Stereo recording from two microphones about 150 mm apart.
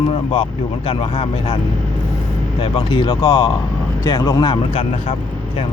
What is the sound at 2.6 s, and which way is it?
Speech, 35° left (ahead or behind).